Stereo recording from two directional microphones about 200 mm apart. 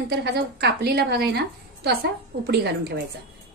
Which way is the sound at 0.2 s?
55° right (ahead or behind).